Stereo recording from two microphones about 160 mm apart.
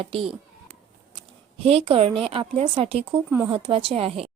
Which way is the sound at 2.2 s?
40° right (ahead or behind).